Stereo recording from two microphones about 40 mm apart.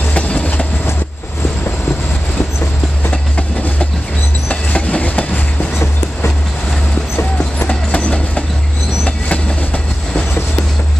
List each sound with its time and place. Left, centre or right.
0.1 s train: left
4.5 s train: left
7.6 s train: left